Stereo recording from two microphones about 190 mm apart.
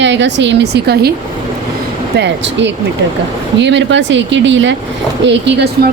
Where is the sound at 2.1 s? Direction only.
65° right (ahead or behind).